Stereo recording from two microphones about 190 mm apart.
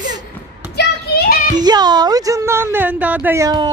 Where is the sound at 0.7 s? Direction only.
55° left (ahead or behind).